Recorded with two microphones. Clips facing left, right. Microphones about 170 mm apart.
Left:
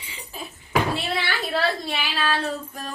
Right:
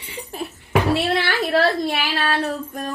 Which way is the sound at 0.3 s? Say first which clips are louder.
Right 6 dB; 65° right (ahead or behind).